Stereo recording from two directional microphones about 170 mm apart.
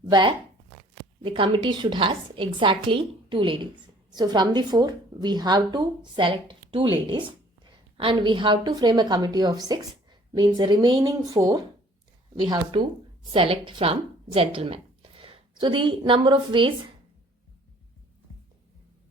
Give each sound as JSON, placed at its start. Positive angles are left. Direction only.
{"t": 0.1, "sound": "a woman's voice", "side_deg": -25}